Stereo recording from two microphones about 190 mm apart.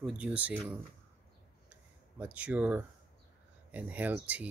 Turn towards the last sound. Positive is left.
turn(degrees=-10)  # may be behind; listen again after turning